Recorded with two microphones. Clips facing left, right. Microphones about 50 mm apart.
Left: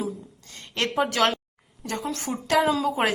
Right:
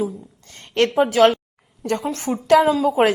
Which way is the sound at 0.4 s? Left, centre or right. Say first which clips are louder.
Right 10 dB; right.